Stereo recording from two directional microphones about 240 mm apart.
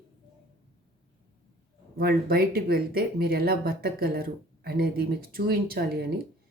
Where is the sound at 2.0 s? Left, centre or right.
Right.